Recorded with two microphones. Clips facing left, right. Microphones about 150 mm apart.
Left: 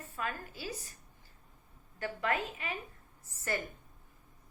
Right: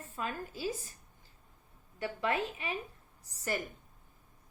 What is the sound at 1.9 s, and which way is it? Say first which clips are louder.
Speech: right 1 dB; 15° right (ahead or behind).